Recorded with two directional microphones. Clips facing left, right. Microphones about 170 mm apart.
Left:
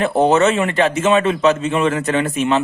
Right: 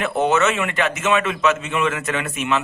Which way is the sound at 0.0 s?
35° left (ahead or behind).